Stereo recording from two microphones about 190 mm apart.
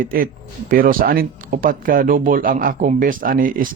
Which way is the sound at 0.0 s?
50° right (ahead or behind).